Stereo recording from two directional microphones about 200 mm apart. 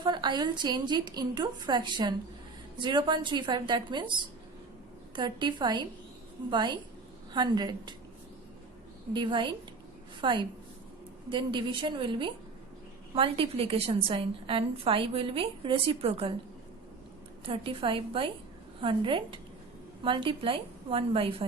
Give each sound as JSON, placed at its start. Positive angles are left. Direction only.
{"t": 0.0, "sound": "a woman's voice", "side_deg": -20}
{"t": 5.1, "sound": "a woman's voice", "side_deg": -25}
{"t": 9.1, "sound": "a woman's voice", "side_deg": -25}
{"t": 17.4, "sound": "a woman's voice", "side_deg": -25}